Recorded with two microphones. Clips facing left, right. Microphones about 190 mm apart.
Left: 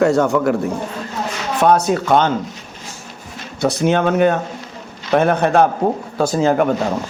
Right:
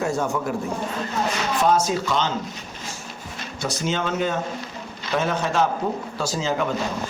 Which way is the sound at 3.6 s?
60° left (ahead or behind).